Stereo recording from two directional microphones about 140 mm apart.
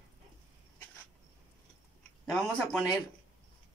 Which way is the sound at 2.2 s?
5° left (ahead or behind).